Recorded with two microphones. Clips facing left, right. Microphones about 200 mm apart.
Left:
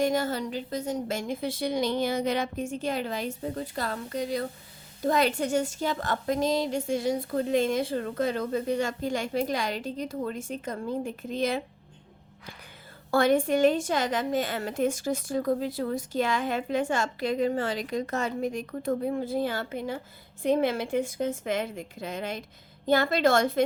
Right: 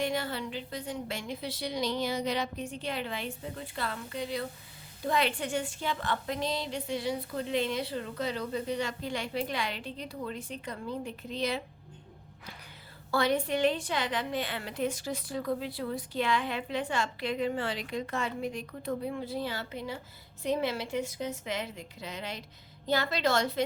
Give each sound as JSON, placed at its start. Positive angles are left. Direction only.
{"t": 0.0, "sound": "a woman's voice", "side_deg": 45}
{"t": 13.1, "sound": "a woman's voice", "side_deg": 50}